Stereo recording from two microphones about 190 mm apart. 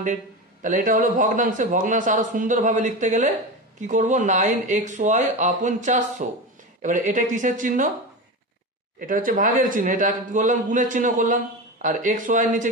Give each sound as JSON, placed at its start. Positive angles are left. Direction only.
{"t": 0.6, "sound": "a man's voice", "side_deg": -45}
{"t": 9.0, "sound": "a man's voice", "side_deg": -45}